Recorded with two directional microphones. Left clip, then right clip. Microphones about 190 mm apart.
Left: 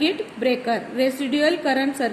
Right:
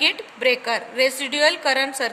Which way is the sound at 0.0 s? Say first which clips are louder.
Right 2 dB; 55° right (ahead or behind).